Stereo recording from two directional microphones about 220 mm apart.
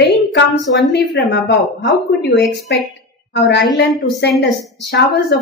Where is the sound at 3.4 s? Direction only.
50° left (ahead or behind).